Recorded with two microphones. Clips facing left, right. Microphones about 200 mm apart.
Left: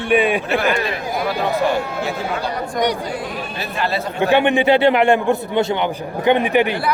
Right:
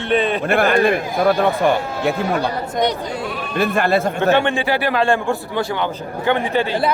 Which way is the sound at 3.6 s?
50° right (ahead or behind).